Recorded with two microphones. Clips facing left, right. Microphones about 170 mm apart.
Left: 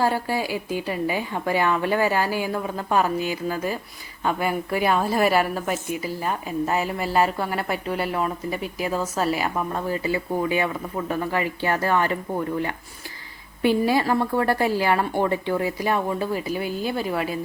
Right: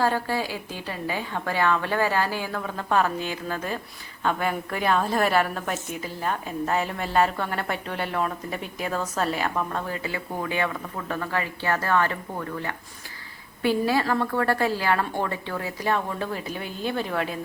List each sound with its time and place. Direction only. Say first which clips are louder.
0.0 s a woman's voice: left 1 dB; 10° left (ahead or behind)